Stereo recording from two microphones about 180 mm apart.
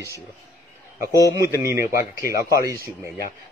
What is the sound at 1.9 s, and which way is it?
Speech, 15° right (ahead or behind).